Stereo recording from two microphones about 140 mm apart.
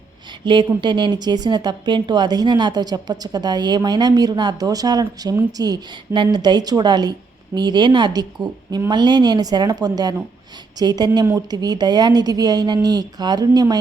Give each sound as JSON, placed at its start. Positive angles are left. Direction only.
{"t": 0.3, "sound": "a woman's voice", "side_deg": -35}